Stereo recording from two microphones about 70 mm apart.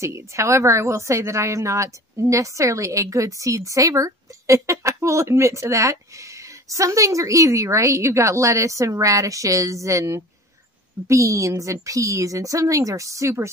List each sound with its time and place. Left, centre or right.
0.0 s a woman's voice: right